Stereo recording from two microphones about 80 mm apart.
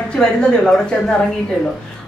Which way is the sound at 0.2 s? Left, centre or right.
Centre.